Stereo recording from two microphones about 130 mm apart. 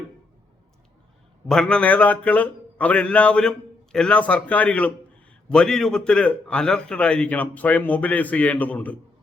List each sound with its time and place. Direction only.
1.5 s a man's voice: 5° left (ahead or behind)